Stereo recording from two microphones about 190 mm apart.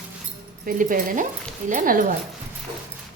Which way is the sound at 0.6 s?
50° right (ahead or behind).